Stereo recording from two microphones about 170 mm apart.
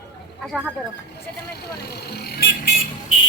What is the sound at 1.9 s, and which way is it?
Vehicle, 70° left (ahead or behind).